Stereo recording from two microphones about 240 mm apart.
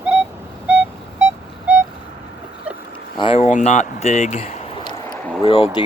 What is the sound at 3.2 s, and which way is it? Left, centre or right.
Speech, left.